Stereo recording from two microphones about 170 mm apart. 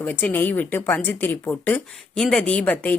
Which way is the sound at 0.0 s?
10° left (ahead or behind).